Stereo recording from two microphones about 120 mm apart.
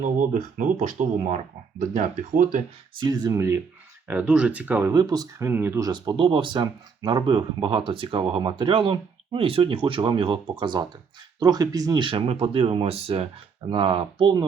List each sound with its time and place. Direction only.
0.0 s speech: 90° right
3.0 s speech: 35° right (ahead or behind)
4.1 s speech: 10° right (ahead or behind)
4.9 s speech: 30° right (ahead or behind)
5.5 s speech: 15° right (ahead or behind)
5.8 s speech: 40° right (ahead or behind)
12.0 s speech: 50° right (ahead or behind)
13.7 s speech: 45° right (ahead or behind)